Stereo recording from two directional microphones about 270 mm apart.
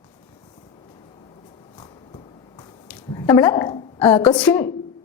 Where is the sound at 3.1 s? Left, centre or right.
Centre.